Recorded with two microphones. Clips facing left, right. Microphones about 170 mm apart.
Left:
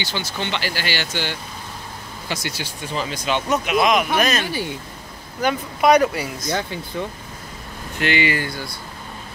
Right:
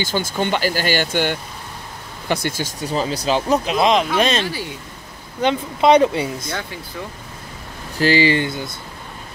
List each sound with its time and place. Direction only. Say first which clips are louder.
0.0 s speech: right 6 dB; 50° right (ahead or behind); by 6.5 s 25° right (ahead or behind)
8.0 s speech: right 5 dB; 30° right (ahead or behind)